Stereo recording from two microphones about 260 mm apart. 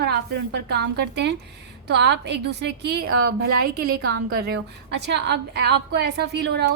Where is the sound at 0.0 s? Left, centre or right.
Right.